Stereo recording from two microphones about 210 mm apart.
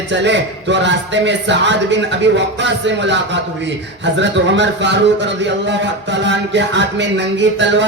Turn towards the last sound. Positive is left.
turn(degrees=-60)  # may be behind; listen again after turning